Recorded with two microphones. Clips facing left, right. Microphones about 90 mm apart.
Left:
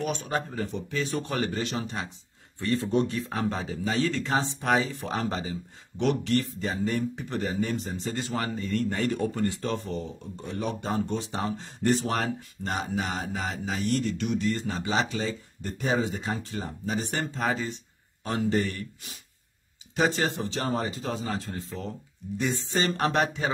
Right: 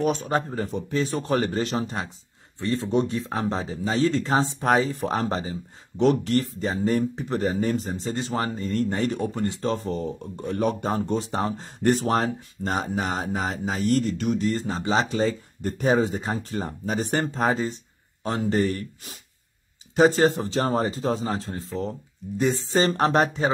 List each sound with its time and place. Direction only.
0.0 s speech: 35° right (ahead or behind)
2.6 s speech: 25° right (ahead or behind)
10.4 s speech: 50° right (ahead or behind)
12.1 s speech: 35° right (ahead or behind)